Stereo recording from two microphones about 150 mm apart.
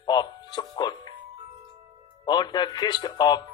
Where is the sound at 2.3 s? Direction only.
30° left (ahead or behind).